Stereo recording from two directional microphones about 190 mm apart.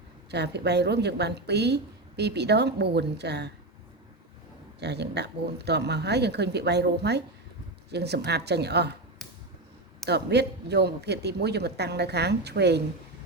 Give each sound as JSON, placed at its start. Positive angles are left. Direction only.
{"t": 0.3, "sound": "a woman's voice", "side_deg": -60}
{"t": 4.8, "sound": "a woman's voice", "side_deg": -60}
{"t": 10.1, "sound": "a woman's voice", "side_deg": -60}